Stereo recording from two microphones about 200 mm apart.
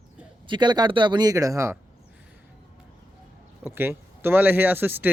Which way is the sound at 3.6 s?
10° right (ahead or behind).